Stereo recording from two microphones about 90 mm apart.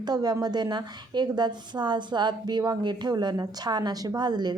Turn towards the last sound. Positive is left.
turn(degrees=-50)  # may be behind; listen again after turning